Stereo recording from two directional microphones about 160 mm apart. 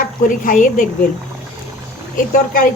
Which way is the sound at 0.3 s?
55° left (ahead or behind).